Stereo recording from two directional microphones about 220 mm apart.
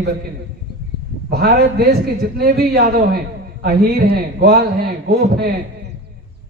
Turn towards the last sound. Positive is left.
turn(degrees=-45)  # may be behind; listen again after turning